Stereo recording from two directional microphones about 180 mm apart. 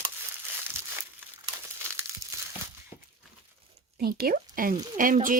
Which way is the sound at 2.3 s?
15° right (ahead or behind).